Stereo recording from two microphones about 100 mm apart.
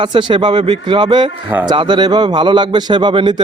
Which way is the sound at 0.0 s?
55° right (ahead or behind).